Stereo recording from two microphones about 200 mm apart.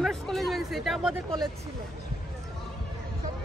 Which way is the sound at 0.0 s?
Centre (ahead or behind).